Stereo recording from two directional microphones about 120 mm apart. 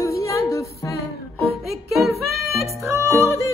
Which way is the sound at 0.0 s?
25° left (ahead or behind).